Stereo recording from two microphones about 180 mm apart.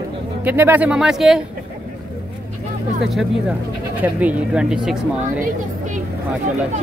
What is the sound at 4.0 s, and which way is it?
Speech, 10° right (ahead or behind).